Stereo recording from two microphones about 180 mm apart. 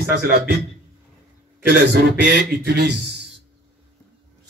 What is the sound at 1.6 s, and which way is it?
A man's voice, 70° right (ahead or behind).